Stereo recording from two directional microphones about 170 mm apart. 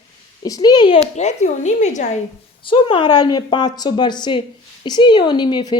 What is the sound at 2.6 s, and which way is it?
A woman's voice, 30° left (ahead or behind).